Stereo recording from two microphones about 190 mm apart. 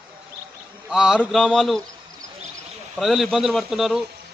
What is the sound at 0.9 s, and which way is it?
Speech, 5° right (ahead or behind).